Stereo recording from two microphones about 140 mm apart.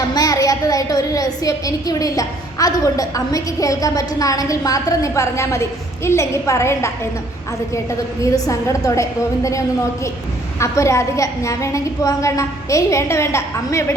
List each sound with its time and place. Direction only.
0.1 s a woman's voice: 25° left (ahead or behind)
8.2 s a woman's voice: 20° left (ahead or behind)